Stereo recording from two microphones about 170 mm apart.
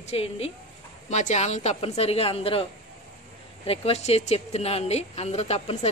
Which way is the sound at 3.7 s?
40° left (ahead or behind).